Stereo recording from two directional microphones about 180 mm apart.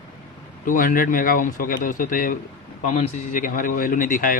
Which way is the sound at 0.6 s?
50° left (ahead or behind).